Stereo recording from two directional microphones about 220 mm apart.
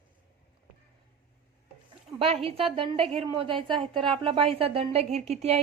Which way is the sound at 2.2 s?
25° right (ahead or behind).